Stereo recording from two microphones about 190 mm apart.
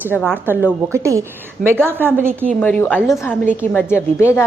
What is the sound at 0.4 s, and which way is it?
A woman's voice, 10° right (ahead or behind).